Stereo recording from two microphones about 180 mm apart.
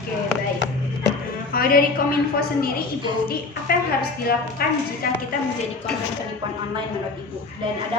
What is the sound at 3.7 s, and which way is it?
A woman's voice, 55° left (ahead or behind).